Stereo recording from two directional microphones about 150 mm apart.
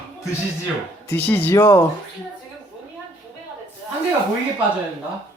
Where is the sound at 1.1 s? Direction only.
15° left (ahead or behind).